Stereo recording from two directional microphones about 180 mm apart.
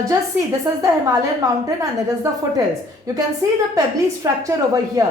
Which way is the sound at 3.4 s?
15° right (ahead or behind).